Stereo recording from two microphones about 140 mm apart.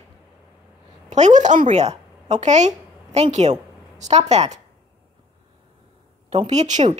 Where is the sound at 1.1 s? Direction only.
60° right (ahead or behind).